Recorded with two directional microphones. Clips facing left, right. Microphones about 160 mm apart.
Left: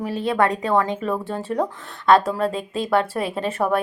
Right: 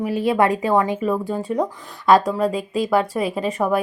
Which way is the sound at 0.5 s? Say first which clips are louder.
Right 2 dB; 5° right (ahead or behind).